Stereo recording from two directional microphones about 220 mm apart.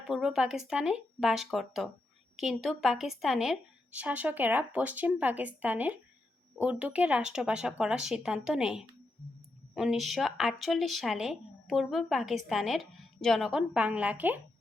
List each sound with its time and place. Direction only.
0.1 s a woman's voice: centre (ahead or behind)